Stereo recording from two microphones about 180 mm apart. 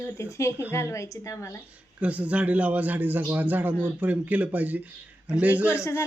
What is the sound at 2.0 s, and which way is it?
A man's voice, 5° right (ahead or behind).